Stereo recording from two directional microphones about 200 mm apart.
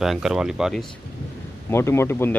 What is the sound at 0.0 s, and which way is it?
Speech, centre (ahead or behind).